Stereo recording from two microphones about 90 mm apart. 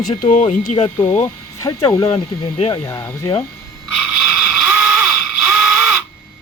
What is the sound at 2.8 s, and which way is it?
Speech, 30° left (ahead or behind).